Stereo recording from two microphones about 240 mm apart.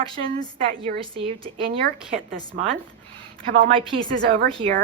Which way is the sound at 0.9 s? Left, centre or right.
Right.